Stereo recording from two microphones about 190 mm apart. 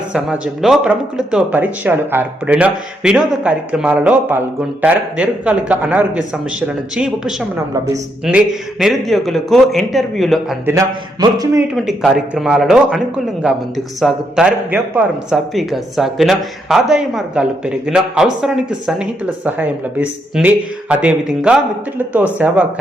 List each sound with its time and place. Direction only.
0.1 s speech: 5° right (ahead or behind)
10.7 s speech: 15° right (ahead or behind)
11.7 s speech: centre (ahead or behind)